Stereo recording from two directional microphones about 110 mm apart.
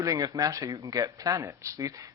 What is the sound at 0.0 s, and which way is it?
Speech, 35° right (ahead or behind).